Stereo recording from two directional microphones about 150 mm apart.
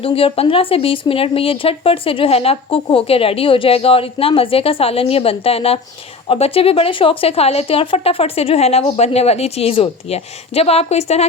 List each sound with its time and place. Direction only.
0.0 s a woman's voice: 40° left (ahead or behind)